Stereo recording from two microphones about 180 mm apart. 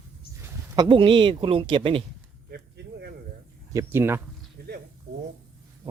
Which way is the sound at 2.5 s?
60° right (ahead or behind).